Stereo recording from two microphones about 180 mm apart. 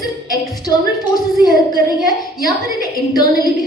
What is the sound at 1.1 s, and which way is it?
Speech, 20° left (ahead or behind).